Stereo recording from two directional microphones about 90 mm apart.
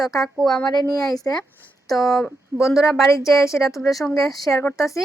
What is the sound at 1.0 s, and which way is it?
Speech, 40° left (ahead or behind).